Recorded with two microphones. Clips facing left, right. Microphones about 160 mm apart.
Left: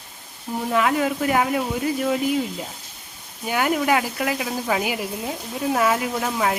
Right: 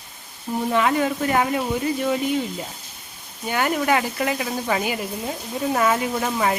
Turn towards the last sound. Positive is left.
turn(degrees=0)  # may be behind; listen again after turning